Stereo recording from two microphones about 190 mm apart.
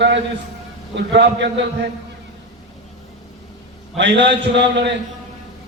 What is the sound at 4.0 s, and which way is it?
Speech, 70° right (ahead or behind).